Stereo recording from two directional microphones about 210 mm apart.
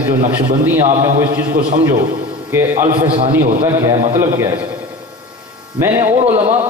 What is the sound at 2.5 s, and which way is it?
A man's voice, 15° right (ahead or behind).